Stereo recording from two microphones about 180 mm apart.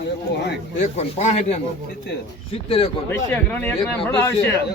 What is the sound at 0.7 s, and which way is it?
Speech, 40° left (ahead or behind).